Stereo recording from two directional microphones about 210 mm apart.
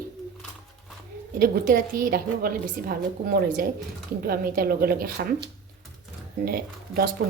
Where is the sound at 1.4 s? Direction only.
45° right (ahead or behind).